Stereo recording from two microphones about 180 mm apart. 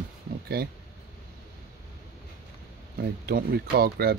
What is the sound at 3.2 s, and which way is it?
Speech, 60° right (ahead or behind).